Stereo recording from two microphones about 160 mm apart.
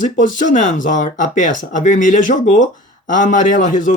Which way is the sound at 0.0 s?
55° left (ahead or behind).